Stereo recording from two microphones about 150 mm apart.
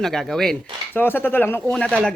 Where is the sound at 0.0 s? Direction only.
Centre (ahead or behind).